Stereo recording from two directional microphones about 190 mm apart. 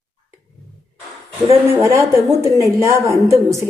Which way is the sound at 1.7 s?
15° right (ahead or behind).